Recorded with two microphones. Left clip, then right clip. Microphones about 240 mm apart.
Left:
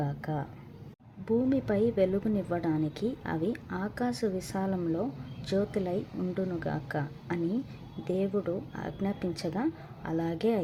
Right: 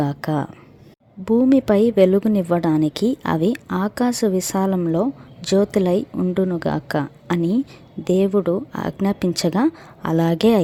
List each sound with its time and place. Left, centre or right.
0.0 s a woman's voice: right